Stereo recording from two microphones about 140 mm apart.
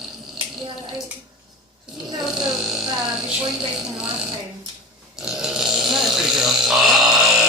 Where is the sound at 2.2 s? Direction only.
Centre (ahead or behind).